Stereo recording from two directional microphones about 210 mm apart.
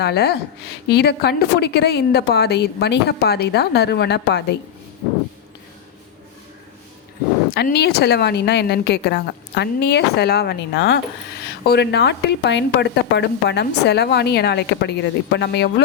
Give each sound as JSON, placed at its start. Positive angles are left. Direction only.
{"t": 0.0, "sound": "speech", "side_deg": 50}
{"t": 7.5, "sound": "speech", "side_deg": 50}